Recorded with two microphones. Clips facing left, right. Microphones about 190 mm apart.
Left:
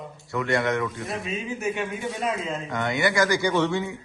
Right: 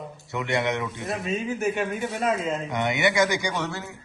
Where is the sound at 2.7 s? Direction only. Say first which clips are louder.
Even; 20° right (ahead or behind); by 3.9 s 5° right (ahead or behind).